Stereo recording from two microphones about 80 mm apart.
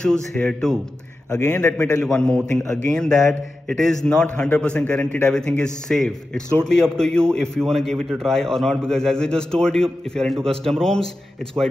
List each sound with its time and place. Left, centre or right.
0.0 s a man's voice: centre
1.3 s a man's voice: left
1.6 s a man's voice: centre